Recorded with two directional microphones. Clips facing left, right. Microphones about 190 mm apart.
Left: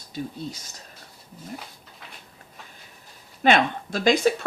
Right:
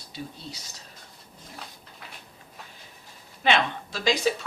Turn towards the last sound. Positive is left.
turn(degrees=55)  # may be behind; listen again after turning